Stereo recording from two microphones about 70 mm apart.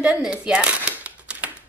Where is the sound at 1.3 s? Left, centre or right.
Centre.